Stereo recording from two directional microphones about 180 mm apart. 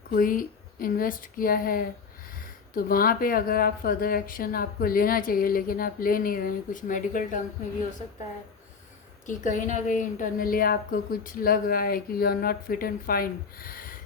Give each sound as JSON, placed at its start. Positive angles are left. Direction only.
{"t": 0.1, "sound": "a woman's voice", "side_deg": 50}
{"t": 9.2, "sound": "a woman's voice", "side_deg": 45}